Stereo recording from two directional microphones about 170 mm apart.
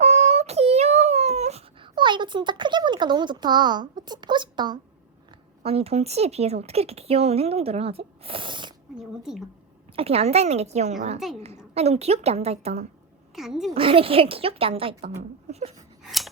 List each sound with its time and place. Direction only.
0.0 s a sound: 40° right (ahead or behind); by 4.8 s 25° right (ahead or behind)
5.6 s speech: 35° right (ahead or behind)
9.0 s a woman's voice: 5° right (ahead or behind)
9.9 s speech: 35° right (ahead or behind)
13.3 s a woman's voice: centre (ahead or behind)
13.7 s speech: 30° right (ahead or behind)
15.0 s speech: 45° right (ahead or behind)
16.0 s scissors: centre (ahead or behind)